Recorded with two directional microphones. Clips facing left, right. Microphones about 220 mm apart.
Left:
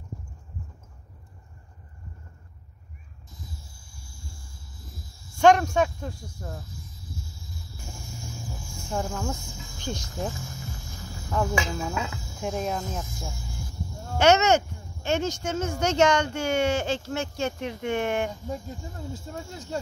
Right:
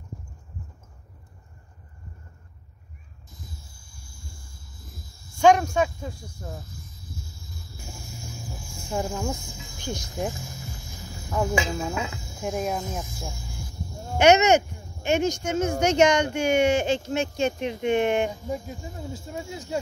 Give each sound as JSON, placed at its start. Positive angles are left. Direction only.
{"t": 5.4, "sound": "speech", "side_deg": 0}
{"t": 8.9, "sound": "speech", "side_deg": -10}
{"t": 11.7, "sound": "speech", "side_deg": -15}